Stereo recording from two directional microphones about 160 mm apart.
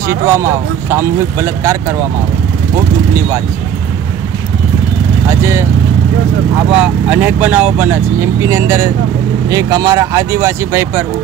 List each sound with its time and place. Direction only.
0.3 s speech: 15° right (ahead or behind)
5.3 s speech: 15° right (ahead or behind)
6.7 s speech: 5° right (ahead or behind)